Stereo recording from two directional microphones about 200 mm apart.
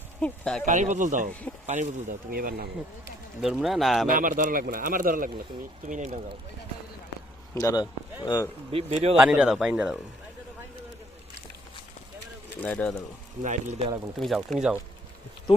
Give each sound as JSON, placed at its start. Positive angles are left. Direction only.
{"t": 0.2, "sound": "speech", "side_deg": 5}
{"t": 0.6, "sound": "a man's voice", "side_deg": -40}
{"t": 3.4, "sound": "speech", "side_deg": 0}
{"t": 4.0, "sound": "a man's voice", "side_deg": -45}
{"t": 7.5, "sound": "speech", "side_deg": 20}
{"t": 8.7, "sound": "speech", "side_deg": -30}
{"t": 9.1, "sound": "speech", "side_deg": -5}
{"t": 12.5, "sound": "speech", "side_deg": 10}
{"t": 13.4, "sound": "speech", "side_deg": -40}
{"t": 14.2, "sound": "speech", "side_deg": 0}